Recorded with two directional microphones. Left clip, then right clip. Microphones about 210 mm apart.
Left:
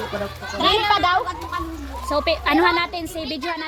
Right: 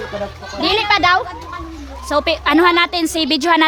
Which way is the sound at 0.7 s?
35° right (ahead or behind).